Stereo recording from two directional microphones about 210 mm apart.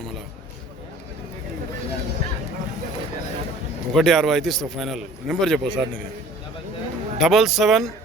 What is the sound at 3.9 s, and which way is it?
A man's voice, centre (ahead or behind).